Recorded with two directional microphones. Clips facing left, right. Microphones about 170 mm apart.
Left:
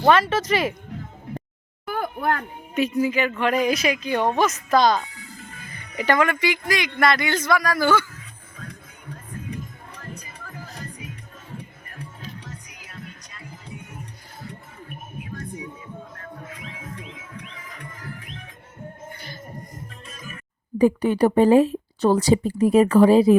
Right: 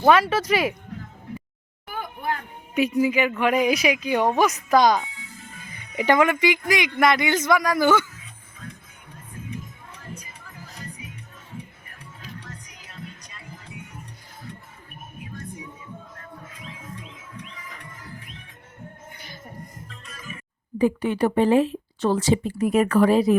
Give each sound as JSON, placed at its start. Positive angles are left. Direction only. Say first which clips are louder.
{"t": 0.0, "sound": "speech", "louder": "even", "side_deg": -5}
{"t": 1.9, "sound": "speech", "louder": "left 5 dB", "side_deg": 65}
{"t": 2.7, "sound": "a man's voice", "louder": "right 1 dB", "side_deg": -10}
{"t": 19.1, "sound": "music", "louder": "left 4 dB", "side_deg": -15}
{"t": 20.7, "sound": "speech", "louder": "left 3 dB", "side_deg": 40}